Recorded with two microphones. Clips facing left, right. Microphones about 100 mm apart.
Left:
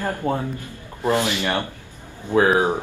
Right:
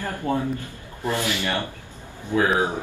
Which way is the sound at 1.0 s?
20° left (ahead or behind).